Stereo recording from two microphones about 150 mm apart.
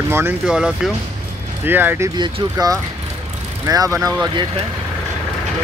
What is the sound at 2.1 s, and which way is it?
Speech, 25° right (ahead or behind).